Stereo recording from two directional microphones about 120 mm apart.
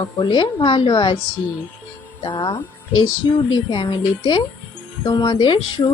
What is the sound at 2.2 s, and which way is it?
Speech, 40° left (ahead or behind).